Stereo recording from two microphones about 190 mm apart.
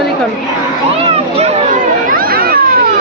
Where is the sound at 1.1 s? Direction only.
35° right (ahead or behind).